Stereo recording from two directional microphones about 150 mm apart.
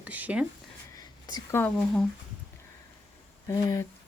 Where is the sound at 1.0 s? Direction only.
25° left (ahead or behind).